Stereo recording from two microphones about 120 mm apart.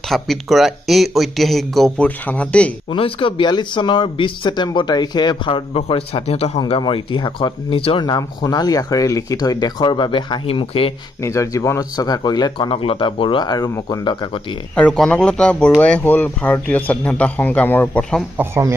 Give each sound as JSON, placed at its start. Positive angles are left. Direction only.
{"t": 0.1, "sound": "speech", "side_deg": 0}
{"t": 2.0, "sound": "speech", "side_deg": 10}
{"t": 2.9, "sound": "speech", "side_deg": 45}
{"t": 5.8, "sound": "a man's voice", "side_deg": 50}
{"t": 6.8, "sound": "speech", "side_deg": 40}
{"t": 11.2, "sound": "speech", "side_deg": 25}
{"t": 14.8, "sound": "speech", "side_deg": 10}
{"t": 18.4, "sound": "speech", "side_deg": -20}